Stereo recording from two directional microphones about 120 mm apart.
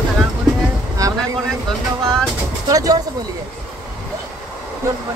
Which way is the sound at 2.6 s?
30° right (ahead or behind).